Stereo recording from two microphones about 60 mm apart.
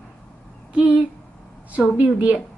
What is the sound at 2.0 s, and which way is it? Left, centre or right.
Speech, right.